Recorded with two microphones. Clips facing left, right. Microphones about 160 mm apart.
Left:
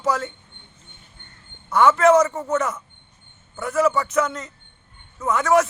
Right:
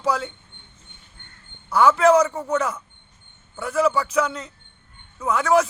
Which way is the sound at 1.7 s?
Centre (ahead or behind).